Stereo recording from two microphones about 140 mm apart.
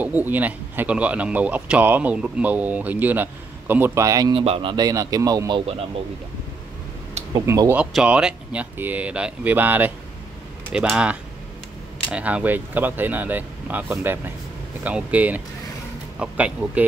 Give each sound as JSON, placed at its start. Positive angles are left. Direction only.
{"t": 0.0, "sound": "speech", "side_deg": -10}
{"t": 4.3, "sound": "speech", "side_deg": -40}
{"t": 4.7, "sound": "speech", "side_deg": -25}
{"t": 7.4, "sound": "speech", "side_deg": -20}
{"t": 7.7, "sound": "speech", "side_deg": -5}